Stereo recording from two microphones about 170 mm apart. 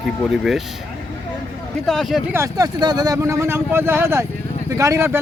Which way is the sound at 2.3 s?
20° right (ahead or behind).